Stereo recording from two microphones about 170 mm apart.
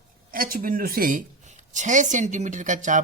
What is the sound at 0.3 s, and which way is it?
A man's voice, 55° right (ahead or behind).